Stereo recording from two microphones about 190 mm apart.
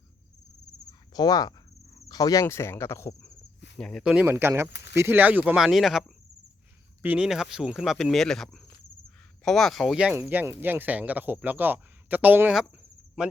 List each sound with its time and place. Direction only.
0.9 s cricket: 20° left (ahead or behind)
2.0 s speech: 20° left (ahead or behind)
3.8 s speech: 5° left (ahead or behind)